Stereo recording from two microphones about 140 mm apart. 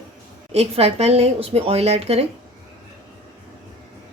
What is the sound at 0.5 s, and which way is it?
Speech, 50° right (ahead or behind).